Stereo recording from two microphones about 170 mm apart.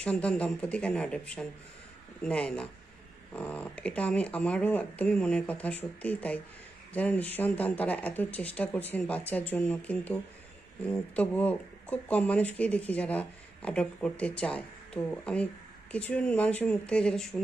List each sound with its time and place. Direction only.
0.0 s speech: 5° left (ahead or behind)